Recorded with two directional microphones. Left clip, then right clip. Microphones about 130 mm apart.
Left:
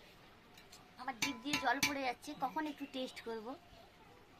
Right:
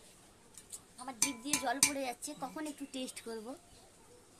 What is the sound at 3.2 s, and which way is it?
Speech, 55° right (ahead or behind).